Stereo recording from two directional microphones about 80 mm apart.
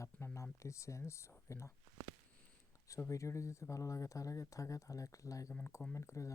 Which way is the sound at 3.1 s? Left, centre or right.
Left.